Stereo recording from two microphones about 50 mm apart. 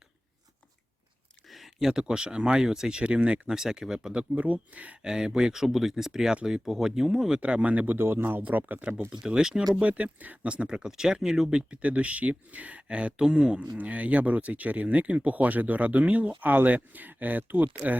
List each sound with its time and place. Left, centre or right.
1.5 s speech: centre
3.0 s speech: right
5.0 s speech: centre; by 7.9 s right
7.9 s speech: right
9.2 s speech: centre
9.9 s speech: right; by 11.4 s centre
11.5 s speech: right